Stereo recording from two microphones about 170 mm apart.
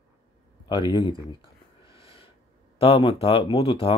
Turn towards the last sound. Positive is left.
turn(degrees=35)  # may be behind; listen again after turning